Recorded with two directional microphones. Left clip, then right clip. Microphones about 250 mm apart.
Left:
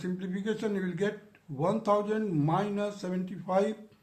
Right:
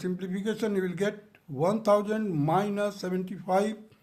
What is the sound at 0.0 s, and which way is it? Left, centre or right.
Speech, right.